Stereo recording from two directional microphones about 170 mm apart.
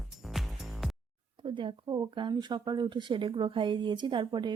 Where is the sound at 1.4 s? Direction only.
30° right (ahead or behind).